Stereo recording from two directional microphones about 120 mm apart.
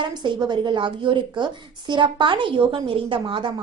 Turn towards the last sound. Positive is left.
turn(degrees=-45)  # may be behind; listen again after turning